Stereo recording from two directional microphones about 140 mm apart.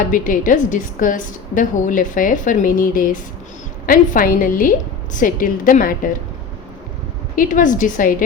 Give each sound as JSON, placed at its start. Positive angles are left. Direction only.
{"t": 0.0, "sound": "a woman's voice", "side_deg": 75}
{"t": 7.3, "sound": "a woman's voice", "side_deg": 75}